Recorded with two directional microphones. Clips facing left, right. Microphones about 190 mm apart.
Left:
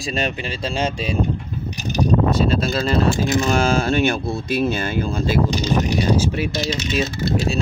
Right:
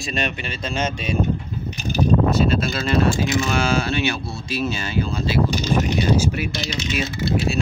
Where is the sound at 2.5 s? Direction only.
35° left (ahead or behind); by 5.4 s 50° left (ahead or behind).